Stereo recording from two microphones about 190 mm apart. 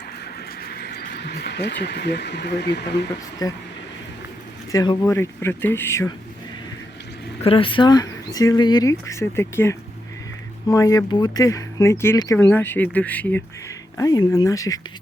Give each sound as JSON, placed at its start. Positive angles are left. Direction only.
{"t": 0.6, "sound": "speech", "side_deg": 55}
{"t": 3.4, "sound": "speech", "side_deg": 20}
{"t": 4.7, "sound": "speech", "side_deg": 20}
{"t": 7.4, "sound": "speech", "side_deg": 30}
{"t": 13.9, "sound": "speech", "side_deg": 20}